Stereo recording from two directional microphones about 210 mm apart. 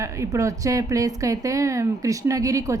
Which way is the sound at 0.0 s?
15° right (ahead or behind).